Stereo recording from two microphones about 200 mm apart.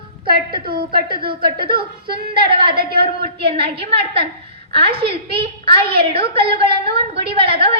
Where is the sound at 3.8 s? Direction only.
30° right (ahead or behind).